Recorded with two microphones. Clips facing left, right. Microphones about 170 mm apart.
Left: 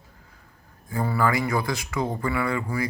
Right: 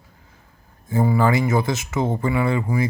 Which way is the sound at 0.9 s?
20° right (ahead or behind).